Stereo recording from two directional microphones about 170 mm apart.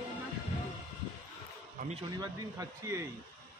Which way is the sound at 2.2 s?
20° right (ahead or behind).